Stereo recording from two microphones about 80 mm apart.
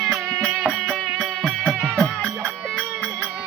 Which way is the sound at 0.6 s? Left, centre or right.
Centre.